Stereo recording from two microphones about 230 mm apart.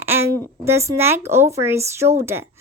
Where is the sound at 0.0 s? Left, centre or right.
Centre.